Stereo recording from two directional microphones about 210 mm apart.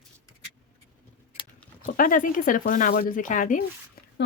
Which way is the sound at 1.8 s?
40° left (ahead or behind).